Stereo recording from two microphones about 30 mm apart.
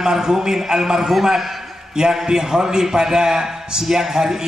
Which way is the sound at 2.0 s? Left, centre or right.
Right.